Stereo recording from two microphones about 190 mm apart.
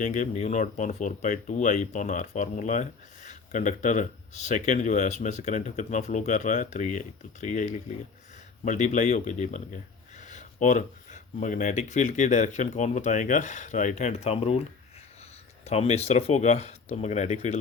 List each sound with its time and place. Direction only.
0.0 s speech: 40° left (ahead or behind)
15.6 s speech: 35° left (ahead or behind)